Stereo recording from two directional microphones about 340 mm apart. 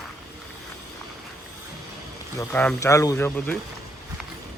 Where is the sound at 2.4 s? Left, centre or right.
Centre.